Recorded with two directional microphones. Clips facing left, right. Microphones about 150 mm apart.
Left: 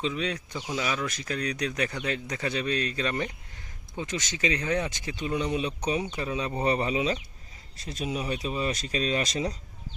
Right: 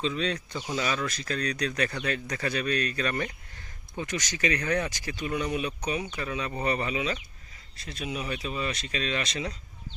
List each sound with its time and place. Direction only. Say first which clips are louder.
0.0 s speech: right 1 dB; 10° left (ahead or behind); by 9.6 s 40° left (ahead or behind)